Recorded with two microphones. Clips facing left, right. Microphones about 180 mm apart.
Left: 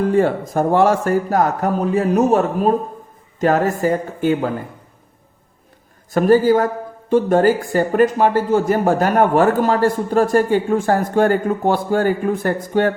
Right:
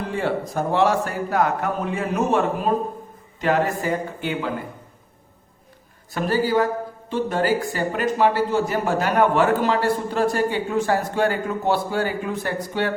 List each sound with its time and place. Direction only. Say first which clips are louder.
0.0 s a man's voice: left 8 dB; 45° left (ahead or behind)
6.1 s a man's voice: left 7 dB; 45° left (ahead or behind)